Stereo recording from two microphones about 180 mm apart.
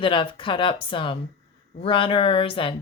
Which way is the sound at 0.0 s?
30° left (ahead or behind).